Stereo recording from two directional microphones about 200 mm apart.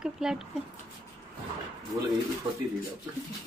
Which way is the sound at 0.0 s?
5° right (ahead or behind).